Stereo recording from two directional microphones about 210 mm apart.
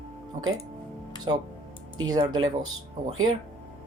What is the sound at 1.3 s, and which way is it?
Speech, 20° right (ahead or behind).